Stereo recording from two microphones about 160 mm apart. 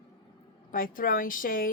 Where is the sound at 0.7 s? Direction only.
60° left (ahead or behind).